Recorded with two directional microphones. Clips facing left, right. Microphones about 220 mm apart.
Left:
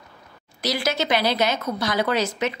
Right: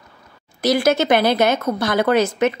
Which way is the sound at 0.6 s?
50° right (ahead or behind).